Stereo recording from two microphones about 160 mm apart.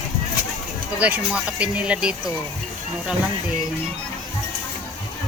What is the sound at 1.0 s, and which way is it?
Speech, 10° right (ahead or behind).